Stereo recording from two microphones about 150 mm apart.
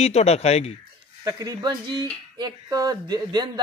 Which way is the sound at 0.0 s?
45° left (ahead or behind).